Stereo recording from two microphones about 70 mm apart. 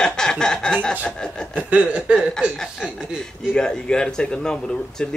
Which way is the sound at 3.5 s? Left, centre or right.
Centre.